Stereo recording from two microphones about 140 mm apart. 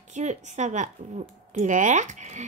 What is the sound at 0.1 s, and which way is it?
A woman's voice, 55° right (ahead or behind).